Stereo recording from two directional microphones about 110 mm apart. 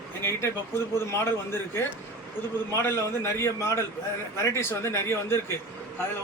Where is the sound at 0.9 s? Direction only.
25° left (ahead or behind).